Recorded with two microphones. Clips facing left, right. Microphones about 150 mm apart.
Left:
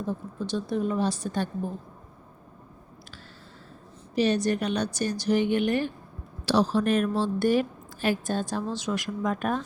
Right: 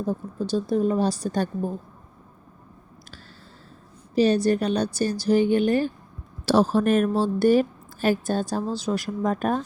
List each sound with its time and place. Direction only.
0.0 s a woman's voice: 40° right (ahead or behind)
4.1 s a woman's voice: 35° right (ahead or behind)
6.4 s a woman's voice: 45° right (ahead or behind)